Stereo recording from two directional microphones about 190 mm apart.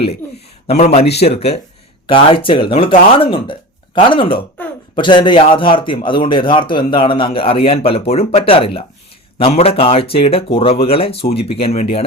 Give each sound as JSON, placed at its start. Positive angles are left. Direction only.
{"t": 0.0, "sound": "a man's voice", "side_deg": 30}